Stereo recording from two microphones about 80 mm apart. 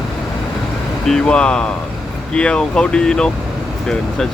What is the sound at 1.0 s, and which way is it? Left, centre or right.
Speech, centre.